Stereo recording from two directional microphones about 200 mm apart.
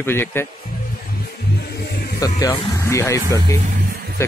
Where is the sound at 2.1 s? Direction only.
15° left (ahead or behind).